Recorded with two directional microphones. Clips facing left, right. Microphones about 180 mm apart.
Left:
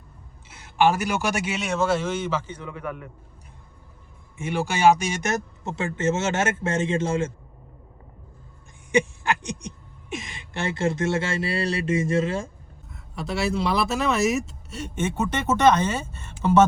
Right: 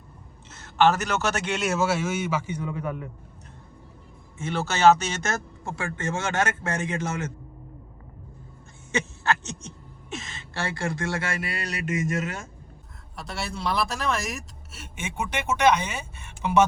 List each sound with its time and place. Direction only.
0.4 s a man's voice: 10° left (ahead or behind); by 3.1 s 20° right (ahead or behind)
4.4 s speech: 15° left (ahead or behind)
8.9 s speech: 15° left (ahead or behind)
13.1 s speech: centre (ahead or behind)